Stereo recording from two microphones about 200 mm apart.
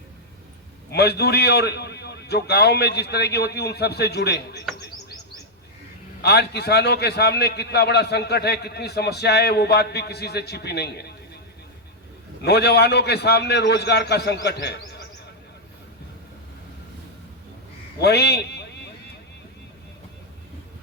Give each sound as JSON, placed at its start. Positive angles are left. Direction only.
{"t": 0.9, "sound": "a man's voice", "side_deg": 55}
{"t": 6.2, "sound": "a man's voice", "side_deg": 55}
{"t": 12.4, "sound": "a man's voice", "side_deg": 55}
{"t": 18.0, "sound": "a man's voice", "side_deg": 55}